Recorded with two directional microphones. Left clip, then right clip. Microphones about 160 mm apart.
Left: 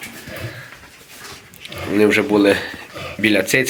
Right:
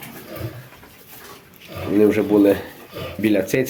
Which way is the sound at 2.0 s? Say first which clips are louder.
Left 1 dB; 10° right (ahead or behind).